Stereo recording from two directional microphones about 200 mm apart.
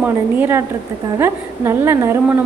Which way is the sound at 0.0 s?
10° right (ahead or behind).